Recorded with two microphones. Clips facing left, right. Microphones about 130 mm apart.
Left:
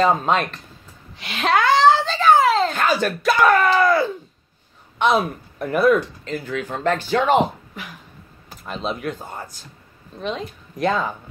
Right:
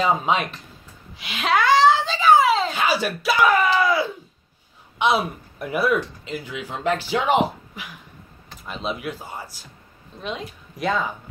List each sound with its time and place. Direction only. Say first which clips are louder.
0.0 s a child's voice: left 3 dB; 5° right (ahead or behind)
8.5 s a woman's voice: left 2 dB; centre (ahead or behind)